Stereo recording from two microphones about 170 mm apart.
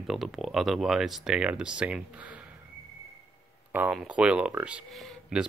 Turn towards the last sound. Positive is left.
turn(degrees=0)  # may be behind; listen again after turning